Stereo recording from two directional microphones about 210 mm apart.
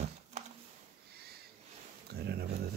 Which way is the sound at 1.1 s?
50° right (ahead or behind).